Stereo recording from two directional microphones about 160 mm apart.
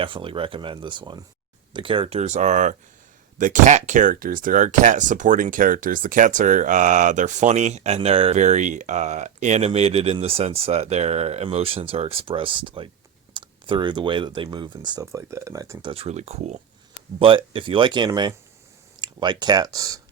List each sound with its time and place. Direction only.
0.0 s speech: 35° right (ahead or behind)
15.9 s speech: 40° right (ahead or behind)
17.2 s speech: 35° right (ahead or behind)